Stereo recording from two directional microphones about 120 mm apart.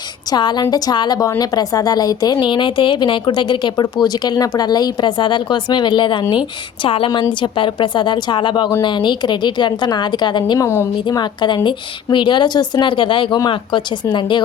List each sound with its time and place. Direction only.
0.3 s speech: 35° left (ahead or behind)